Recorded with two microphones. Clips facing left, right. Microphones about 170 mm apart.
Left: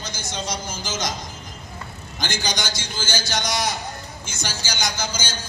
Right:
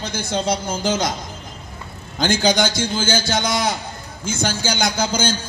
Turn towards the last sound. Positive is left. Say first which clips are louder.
# right 8 dB
turn(degrees=-55)  # may be behind; listen again after turning